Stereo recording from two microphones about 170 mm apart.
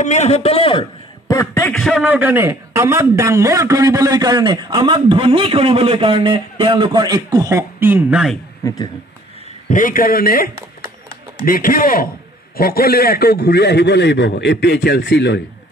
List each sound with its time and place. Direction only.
0.0 s a man's voice: 40° left (ahead or behind)
1.3 s speech: 15° left (ahead or behind)
2.0 s a man's voice: 10° right (ahead or behind)
8.6 s speech: 20° left (ahead or behind)
9.7 s a man's voice: 50° left (ahead or behind); by 15.4 s 85° left